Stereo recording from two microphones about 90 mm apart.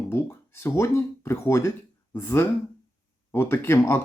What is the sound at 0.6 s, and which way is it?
Speech, 25° left (ahead or behind).